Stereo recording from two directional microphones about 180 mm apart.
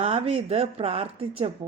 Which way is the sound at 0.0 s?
35° right (ahead or behind).